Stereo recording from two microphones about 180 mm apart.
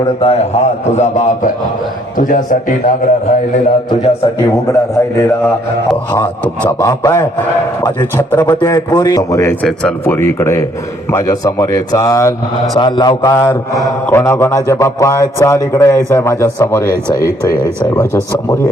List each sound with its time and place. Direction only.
0.0 s a man's voice: 35° left (ahead or behind); by 2.9 s 50° left (ahead or behind)
4.7 s a man's voice: 15° left (ahead or behind)
6.4 s a man's voice: 10° left (ahead or behind)
8.4 s a man's voice: 20° left (ahead or behind)